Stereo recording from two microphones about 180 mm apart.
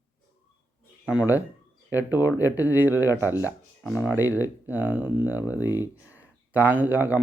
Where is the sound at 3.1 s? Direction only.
15° left (ahead or behind).